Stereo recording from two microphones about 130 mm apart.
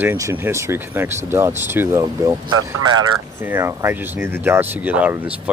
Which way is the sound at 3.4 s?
15° right (ahead or behind).